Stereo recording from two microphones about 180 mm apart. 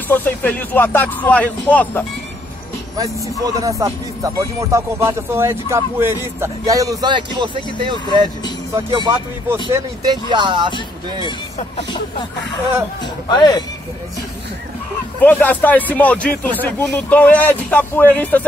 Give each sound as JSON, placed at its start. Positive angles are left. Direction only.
{"t": 0.1, "sound": "speech", "side_deg": 10}
{"t": 3.5, "sound": "speech", "side_deg": -20}
{"t": 10.3, "sound": "speech", "side_deg": -25}
{"t": 10.7, "sound": "speech", "side_deg": 25}
{"t": 13.0, "sound": "speech", "side_deg": 25}
{"t": 15.1, "sound": "speech", "side_deg": 10}